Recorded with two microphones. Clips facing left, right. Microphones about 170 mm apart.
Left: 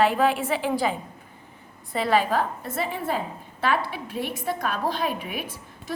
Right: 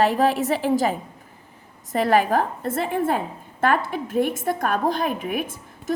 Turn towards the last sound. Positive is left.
turn(degrees=-50)  # may be behind; listen again after turning